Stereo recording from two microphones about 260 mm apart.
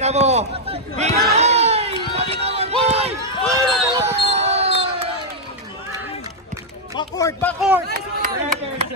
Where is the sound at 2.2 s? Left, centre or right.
Right.